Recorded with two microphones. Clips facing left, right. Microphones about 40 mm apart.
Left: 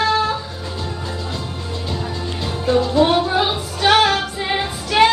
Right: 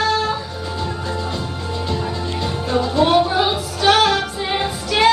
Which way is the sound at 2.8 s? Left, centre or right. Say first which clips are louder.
Right 2 dB; centre.